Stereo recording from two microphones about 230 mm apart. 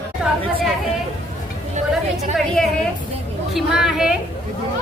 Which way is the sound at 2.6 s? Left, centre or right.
Centre.